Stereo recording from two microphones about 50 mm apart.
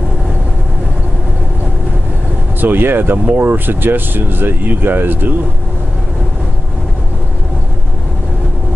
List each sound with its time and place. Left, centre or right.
2.6 s speech: right